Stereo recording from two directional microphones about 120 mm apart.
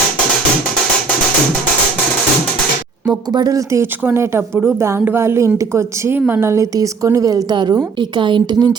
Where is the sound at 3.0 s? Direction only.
35° right (ahead or behind).